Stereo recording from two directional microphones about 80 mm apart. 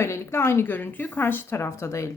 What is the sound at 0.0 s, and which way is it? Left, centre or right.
Speech, left.